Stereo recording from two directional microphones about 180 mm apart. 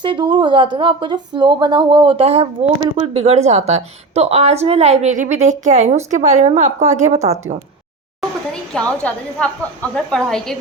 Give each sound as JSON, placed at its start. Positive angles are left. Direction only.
{"t": 0.0, "sound": "a woman's voice", "side_deg": -25}
{"t": 8.7, "sound": "a woman's voice", "side_deg": 5}